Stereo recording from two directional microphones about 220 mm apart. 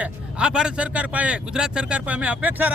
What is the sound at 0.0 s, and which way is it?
Speech, 5° right (ahead or behind).